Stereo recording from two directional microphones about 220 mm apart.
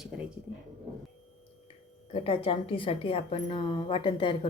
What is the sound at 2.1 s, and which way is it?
A woman's voice, 25° left (ahead or behind).